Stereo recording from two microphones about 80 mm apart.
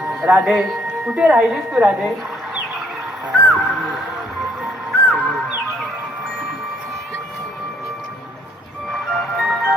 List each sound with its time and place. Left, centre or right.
0.1 s music: centre
0.4 s a woman's voice: centre
3.3 s music: centre
8.9 s music: centre